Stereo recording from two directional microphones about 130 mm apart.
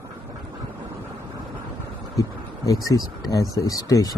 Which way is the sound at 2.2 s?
25° left (ahead or behind).